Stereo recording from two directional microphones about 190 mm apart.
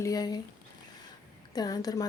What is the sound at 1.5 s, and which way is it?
Speech, 20° left (ahead or behind).